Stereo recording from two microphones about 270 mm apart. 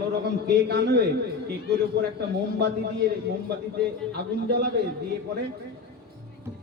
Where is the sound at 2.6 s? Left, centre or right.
Right.